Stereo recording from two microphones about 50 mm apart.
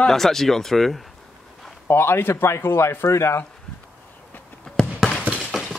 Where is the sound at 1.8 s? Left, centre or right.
Left.